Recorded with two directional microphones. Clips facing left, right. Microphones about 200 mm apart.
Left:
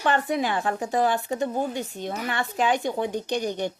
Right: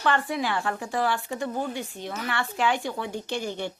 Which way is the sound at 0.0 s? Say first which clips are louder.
Left 2 dB; 20° left (ahead or behind).